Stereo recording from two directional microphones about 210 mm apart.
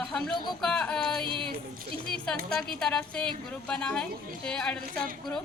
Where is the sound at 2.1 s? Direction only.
5° left (ahead or behind).